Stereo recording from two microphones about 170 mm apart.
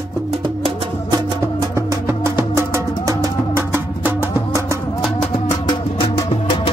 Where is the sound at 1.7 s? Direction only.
15° right (ahead or behind).